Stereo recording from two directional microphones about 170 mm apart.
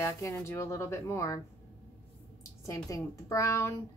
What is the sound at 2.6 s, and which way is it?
A woman's voice, 20° left (ahead or behind).